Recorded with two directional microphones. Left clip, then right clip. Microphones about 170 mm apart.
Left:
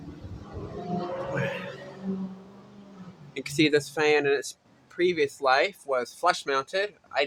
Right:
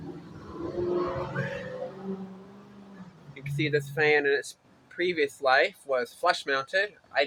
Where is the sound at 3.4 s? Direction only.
40° left (ahead or behind).